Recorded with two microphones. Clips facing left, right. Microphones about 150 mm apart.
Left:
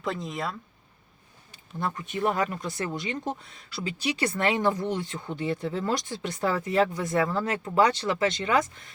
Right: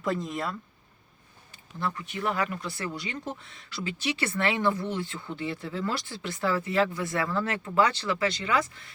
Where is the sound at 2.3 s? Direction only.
40° left (ahead or behind).